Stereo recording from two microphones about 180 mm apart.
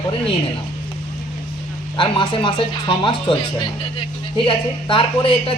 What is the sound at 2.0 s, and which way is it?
Speech, 30° left (ahead or behind).